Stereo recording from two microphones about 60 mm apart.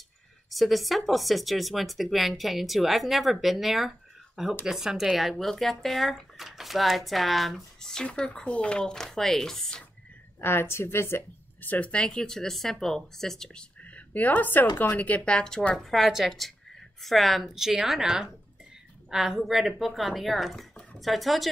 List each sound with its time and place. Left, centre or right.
0.5 s speech: centre
10.4 s speech: left
11.6 s speech: left
11.9 s speech: centre
13.8 s speech: left; by 21.5 s centre